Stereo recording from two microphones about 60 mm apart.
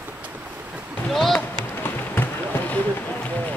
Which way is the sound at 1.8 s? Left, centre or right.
Left.